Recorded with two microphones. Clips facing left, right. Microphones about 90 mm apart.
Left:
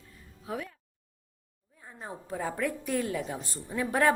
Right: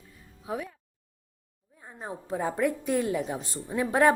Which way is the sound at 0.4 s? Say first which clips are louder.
Right 3 dB; 15° right (ahead or behind).